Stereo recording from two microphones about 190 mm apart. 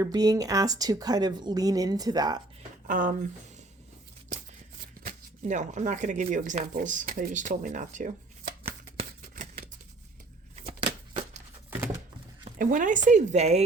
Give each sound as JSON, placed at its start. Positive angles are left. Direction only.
{"t": 0.0, "sound": "a woman's voice", "side_deg": -20}
{"t": 2.8, "sound": "speech", "side_deg": -45}
{"t": 4.3, "sound": "a sound", "side_deg": -40}
{"t": 5.0, "sound": "speech", "side_deg": -40}
{"t": 9.3, "sound": "scissors", "side_deg": -45}
{"t": 10.8, "sound": "a sound", "side_deg": -40}
{"t": 12.5, "sound": "speech", "side_deg": -45}